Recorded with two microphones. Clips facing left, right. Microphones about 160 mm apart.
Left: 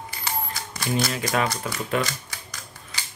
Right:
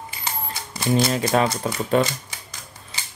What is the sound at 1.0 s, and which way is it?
Speech, 30° right (ahead or behind).